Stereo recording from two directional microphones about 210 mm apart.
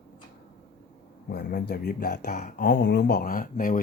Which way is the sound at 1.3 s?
50° left (ahead or behind).